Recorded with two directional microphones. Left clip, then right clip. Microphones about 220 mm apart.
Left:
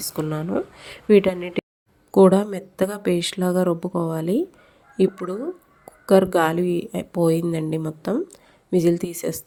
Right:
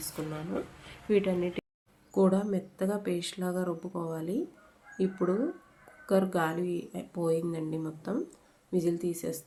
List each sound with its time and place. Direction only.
0.0 s speech: 40° left (ahead or behind)